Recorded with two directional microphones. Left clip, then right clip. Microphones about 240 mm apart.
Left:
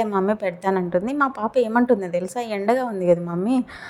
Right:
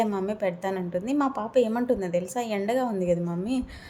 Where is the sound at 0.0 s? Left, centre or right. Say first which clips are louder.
Left 5 dB; centre.